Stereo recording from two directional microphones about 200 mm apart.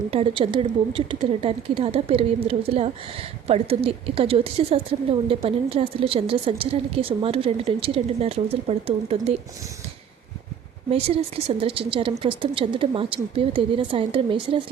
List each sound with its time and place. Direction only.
0.1 s a woman's voice: 25° right (ahead or behind)
10.9 s a woman's voice: 30° right (ahead or behind)